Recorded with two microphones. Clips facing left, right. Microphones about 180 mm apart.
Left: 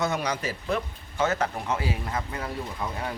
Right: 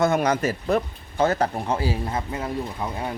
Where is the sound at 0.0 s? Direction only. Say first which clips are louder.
Right 7 dB; 50° right (ahead or behind).